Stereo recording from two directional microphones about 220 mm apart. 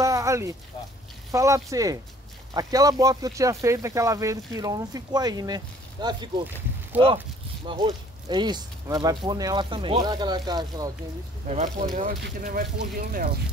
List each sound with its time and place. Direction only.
0.0 s a sound: 15° right (ahead or behind)
1.3 s speech: 15° right (ahead or behind)
7.6 s speech: 20° right (ahead or behind)
11.4 s speech: 30° right (ahead or behind)